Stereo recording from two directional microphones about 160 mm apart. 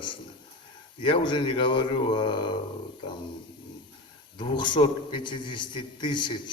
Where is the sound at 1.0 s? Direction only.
30° left (ahead or behind).